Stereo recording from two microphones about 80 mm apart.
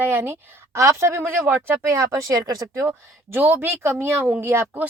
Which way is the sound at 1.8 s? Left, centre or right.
Right.